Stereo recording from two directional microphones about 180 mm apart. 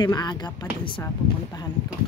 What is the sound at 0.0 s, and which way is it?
Speech, 25° left (ahead or behind).